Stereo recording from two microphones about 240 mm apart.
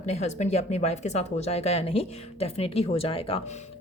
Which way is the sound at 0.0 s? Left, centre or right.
Left.